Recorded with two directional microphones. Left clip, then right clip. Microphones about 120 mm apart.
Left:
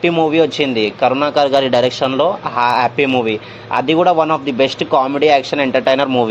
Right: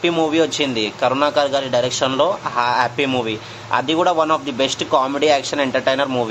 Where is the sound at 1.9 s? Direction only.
20° left (ahead or behind).